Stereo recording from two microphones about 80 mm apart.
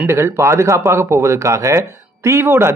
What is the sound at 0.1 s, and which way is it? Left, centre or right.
Speech, right.